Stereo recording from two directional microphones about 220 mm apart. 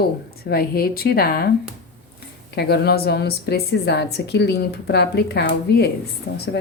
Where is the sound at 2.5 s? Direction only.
45° left (ahead or behind).